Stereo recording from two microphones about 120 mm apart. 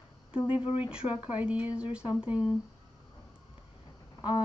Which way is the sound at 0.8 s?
10° right (ahead or behind).